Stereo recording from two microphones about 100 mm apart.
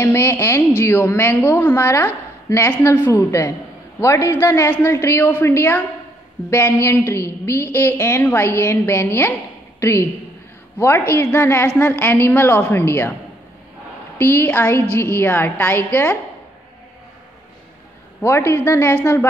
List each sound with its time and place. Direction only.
0.0 s a woman's voice: 25° left (ahead or behind)
14.1 s a woman's voice: 25° left (ahead or behind)
18.2 s a woman's voice: 30° left (ahead or behind)